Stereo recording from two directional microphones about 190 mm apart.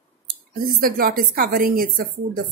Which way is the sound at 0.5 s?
50° right (ahead or behind).